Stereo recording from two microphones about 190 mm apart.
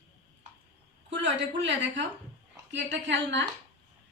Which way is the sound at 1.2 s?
70° right (ahead or behind).